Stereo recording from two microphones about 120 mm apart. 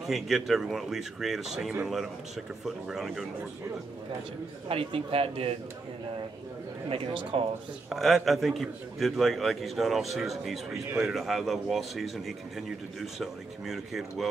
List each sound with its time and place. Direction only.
0.0 s speech: centre (ahead or behind)
4.6 s a man's voice: 50° right (ahead or behind)
6.9 s a man's voice: 45° right (ahead or behind)
7.9 s speech: centre (ahead or behind)